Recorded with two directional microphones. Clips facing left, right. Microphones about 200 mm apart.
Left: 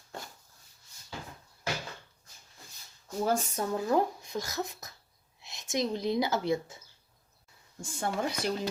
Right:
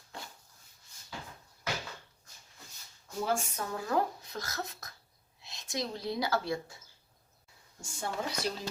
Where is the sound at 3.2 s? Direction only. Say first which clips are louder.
Left 4 dB; 35° left (ahead or behind).